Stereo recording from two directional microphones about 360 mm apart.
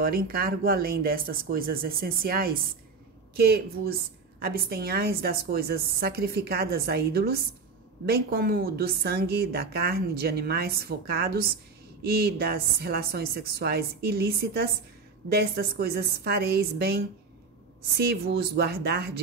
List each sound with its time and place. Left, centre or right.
0.0 s a woman's voice: right